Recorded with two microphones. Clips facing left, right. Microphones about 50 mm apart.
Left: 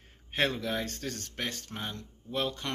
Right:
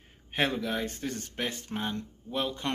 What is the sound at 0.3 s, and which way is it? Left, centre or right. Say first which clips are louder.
Speech: right 1 dB; centre.